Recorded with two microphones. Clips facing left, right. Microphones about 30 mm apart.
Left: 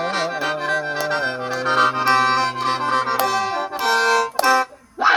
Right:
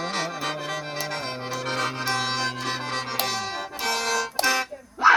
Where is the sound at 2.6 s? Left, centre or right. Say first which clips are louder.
Left 9 dB; left.